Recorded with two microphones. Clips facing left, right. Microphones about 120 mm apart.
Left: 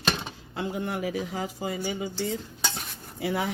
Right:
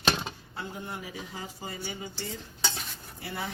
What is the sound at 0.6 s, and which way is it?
Speech, 90° left.